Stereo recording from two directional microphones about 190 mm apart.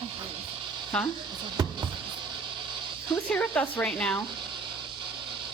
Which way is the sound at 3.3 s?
10° left (ahead or behind).